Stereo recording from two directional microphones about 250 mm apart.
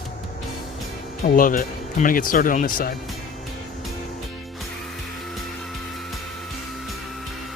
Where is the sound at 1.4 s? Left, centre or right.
Left.